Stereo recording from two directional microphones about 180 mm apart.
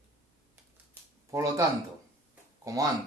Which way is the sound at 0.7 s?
15° right (ahead or behind).